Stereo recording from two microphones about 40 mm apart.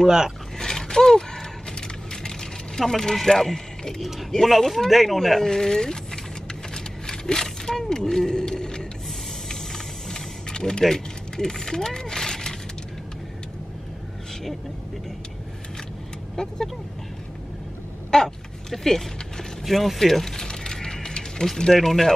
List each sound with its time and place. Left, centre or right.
0.0 s speech: centre
0.6 s a sound: centre
3.2 s a man's voice: centre
6.7 s a sound: centre
10.0 s printer: centre
10.8 s speech: centre
16.4 s speech: centre
18.1 s a sound: centre
21.7 s speech: centre